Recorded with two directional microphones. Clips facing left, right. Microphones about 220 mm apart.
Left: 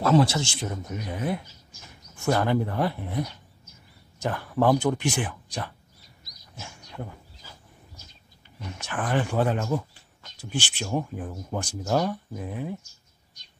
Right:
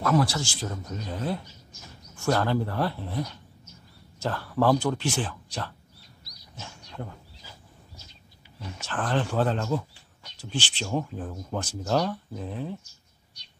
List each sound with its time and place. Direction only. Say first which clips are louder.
0.0 s speech: left 3 dB; 25° left (ahead or behind)
6.5 s a sound: left 1 dB; 5° left (ahead or behind)
8.8 s speech: left 1 dB; 10° left (ahead or behind)